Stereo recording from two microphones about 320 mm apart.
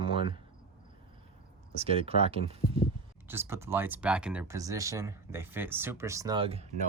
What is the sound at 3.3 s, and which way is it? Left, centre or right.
Speech, centre.